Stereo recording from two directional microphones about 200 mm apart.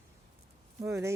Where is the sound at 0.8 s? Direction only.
15° right (ahead or behind).